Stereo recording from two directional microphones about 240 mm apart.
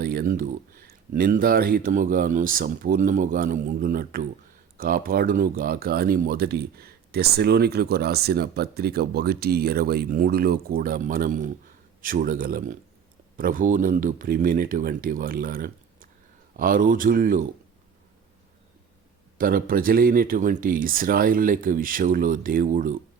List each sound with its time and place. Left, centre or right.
0.0 s speech: right
19.4 s speech: right